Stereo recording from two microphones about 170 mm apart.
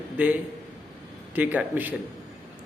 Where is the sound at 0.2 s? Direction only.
10° right (ahead or behind).